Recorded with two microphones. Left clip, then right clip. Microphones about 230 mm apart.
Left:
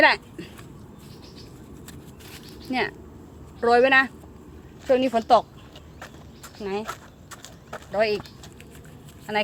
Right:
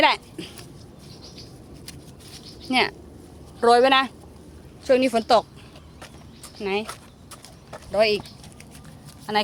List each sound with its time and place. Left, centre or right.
0.0 s speech: centre
2.6 s a woman's voice: centre
6.6 s a woman's voice: centre
6.8 s a sound: centre
7.9 s a woman's voice: centre